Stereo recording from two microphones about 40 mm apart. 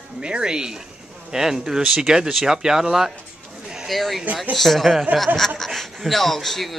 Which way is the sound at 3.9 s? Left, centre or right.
Centre.